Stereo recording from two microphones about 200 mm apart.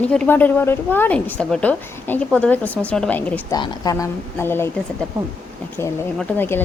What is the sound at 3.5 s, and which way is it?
A woman's voice, 20° left (ahead or behind).